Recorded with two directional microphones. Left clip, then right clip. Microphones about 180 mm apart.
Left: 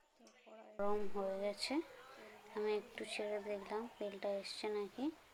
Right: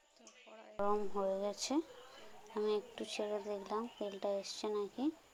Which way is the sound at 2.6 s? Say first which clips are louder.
Right 3 dB; 15° right (ahead or behind).